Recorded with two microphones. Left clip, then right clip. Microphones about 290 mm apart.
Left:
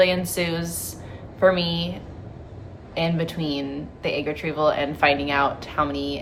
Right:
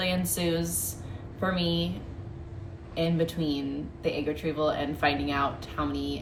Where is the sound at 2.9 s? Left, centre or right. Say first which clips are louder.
Left 3 dB; left.